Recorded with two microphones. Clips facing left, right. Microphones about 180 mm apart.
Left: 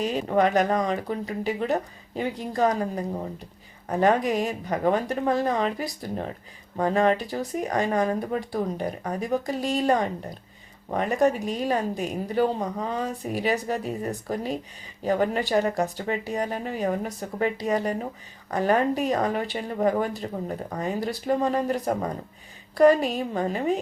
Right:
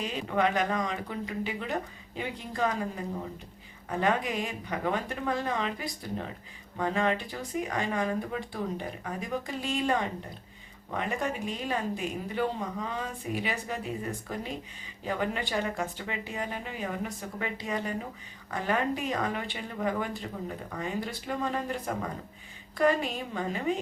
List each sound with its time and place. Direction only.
0.0 s speech: 40° left (ahead or behind)